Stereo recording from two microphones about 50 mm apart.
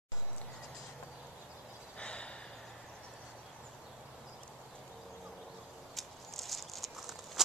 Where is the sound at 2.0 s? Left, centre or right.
Left.